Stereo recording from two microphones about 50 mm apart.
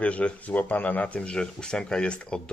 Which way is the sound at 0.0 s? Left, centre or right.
Left.